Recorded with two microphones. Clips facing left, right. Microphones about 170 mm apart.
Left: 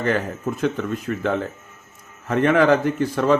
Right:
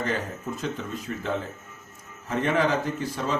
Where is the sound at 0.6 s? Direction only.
60° left (ahead or behind).